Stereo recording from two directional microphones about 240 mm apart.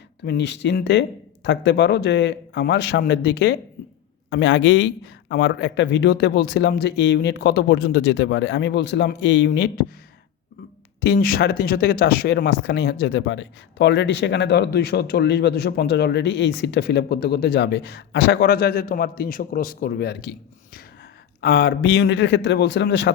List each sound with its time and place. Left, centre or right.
0.3 s speech: left
11.0 s speech: left
21.4 s speech: left